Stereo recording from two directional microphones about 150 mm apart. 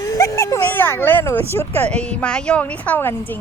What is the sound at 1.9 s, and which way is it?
A woman's voice, 10° left (ahead or behind).